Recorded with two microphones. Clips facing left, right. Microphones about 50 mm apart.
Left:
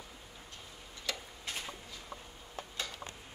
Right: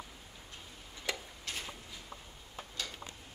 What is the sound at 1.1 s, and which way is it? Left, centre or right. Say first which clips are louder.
Tick-tock: right 2 dB; right.